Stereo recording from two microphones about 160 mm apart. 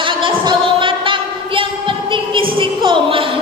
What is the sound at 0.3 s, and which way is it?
Music, 30° right (ahead or behind).